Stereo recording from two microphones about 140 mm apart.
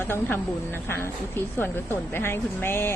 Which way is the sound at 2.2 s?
15° left (ahead or behind).